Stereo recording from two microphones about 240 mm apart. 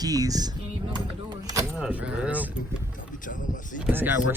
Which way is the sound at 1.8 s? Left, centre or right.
Centre.